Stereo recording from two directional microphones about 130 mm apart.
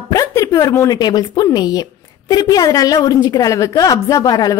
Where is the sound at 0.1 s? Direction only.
25° left (ahead or behind).